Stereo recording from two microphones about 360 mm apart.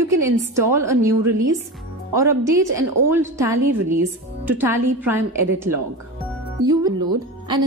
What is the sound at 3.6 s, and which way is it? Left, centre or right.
Speech, right.